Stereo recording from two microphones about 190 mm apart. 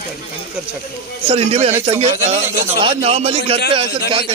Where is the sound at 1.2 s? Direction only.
35° right (ahead or behind).